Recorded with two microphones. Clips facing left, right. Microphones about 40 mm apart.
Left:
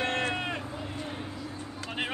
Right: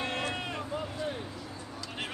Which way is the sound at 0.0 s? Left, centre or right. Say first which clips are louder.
Left 4 dB; left.